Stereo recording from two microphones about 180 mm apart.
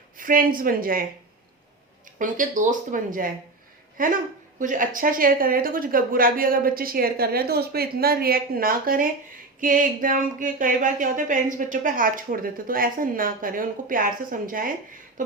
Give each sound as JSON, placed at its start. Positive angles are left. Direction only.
{"t": 0.2, "sound": "a woman's voice", "side_deg": -50}
{"t": 2.1, "sound": "a woman's voice", "side_deg": -45}